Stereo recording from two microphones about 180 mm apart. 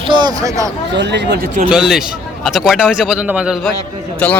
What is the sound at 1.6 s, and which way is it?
A man's voice, 5° right (ahead or behind).